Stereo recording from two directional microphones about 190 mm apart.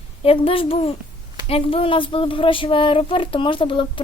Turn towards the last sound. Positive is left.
turn(degrees=25)  # may be behind; listen again after turning